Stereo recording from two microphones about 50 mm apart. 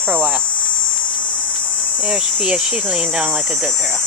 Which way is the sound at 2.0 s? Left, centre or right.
Centre.